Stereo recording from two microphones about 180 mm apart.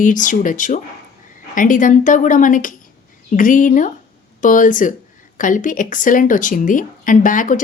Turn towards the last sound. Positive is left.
turn(degrees=45)  # may be behind; listen again after turning